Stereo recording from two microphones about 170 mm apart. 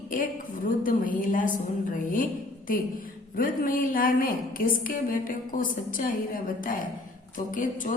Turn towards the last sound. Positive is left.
turn(degrees=50)  # may be behind; listen again after turning